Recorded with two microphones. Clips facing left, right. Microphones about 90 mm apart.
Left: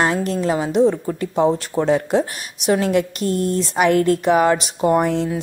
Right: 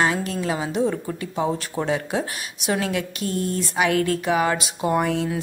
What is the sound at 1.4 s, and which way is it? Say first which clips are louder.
Speech: left 7 dB; 30° left (ahead or behind).